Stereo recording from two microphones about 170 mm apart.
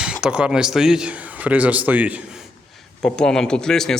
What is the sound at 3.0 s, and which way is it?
Speech, 5° left (ahead or behind).